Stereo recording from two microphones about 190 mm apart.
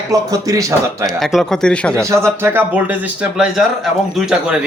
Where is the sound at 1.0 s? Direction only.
Centre (ahead or behind).